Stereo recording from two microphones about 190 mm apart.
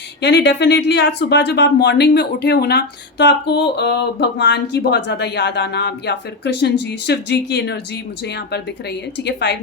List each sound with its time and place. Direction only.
0.2 s speech: 65° left (ahead or behind)
9.2 s speech: 65° left (ahead or behind)